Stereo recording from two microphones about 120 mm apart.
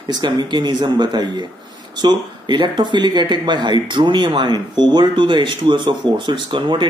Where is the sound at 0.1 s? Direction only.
35° right (ahead or behind).